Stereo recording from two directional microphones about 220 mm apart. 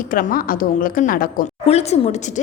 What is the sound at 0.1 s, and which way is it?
A woman's voice, 40° left (ahead or behind).